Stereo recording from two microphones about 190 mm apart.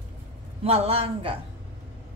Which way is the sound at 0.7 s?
30° right (ahead or behind).